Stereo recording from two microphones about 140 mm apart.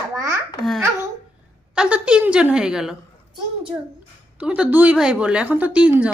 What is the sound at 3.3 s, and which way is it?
Speech, 35° right (ahead or behind).